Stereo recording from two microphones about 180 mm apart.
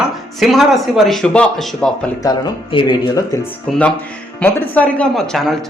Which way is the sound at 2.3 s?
25° left (ahead or behind).